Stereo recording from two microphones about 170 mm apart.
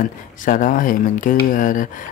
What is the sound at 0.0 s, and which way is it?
Speech, 50° left (ahead or behind).